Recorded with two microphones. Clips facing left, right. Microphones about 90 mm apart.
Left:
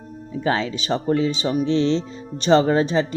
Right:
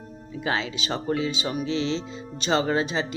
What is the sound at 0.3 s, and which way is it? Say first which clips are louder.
Speech: left 5 dB; 40° left (ahead or behind).